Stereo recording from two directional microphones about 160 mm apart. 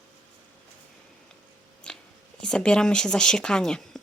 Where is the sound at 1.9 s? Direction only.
5° left (ahead or behind).